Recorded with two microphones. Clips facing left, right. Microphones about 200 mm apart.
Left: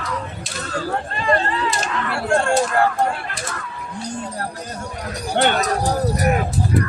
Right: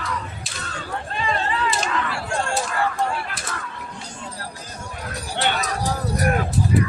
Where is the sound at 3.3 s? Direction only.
Centre (ahead or behind).